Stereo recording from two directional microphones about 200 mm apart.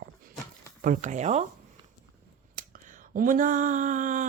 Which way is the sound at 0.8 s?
40° right (ahead or behind).